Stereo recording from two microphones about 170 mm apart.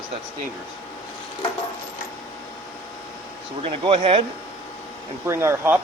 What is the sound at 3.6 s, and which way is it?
Speech, 30° right (ahead or behind).